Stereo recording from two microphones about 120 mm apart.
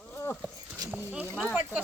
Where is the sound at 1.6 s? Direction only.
15° right (ahead or behind).